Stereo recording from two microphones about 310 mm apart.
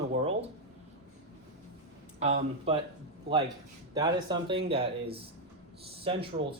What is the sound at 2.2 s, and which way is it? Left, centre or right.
Speech, centre.